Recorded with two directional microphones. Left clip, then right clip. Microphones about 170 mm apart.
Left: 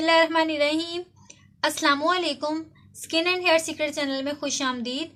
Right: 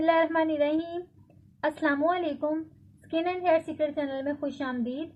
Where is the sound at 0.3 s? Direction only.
15° left (ahead or behind).